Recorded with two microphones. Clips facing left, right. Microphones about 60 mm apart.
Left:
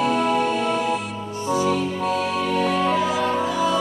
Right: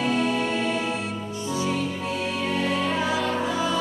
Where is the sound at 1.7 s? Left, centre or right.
Centre.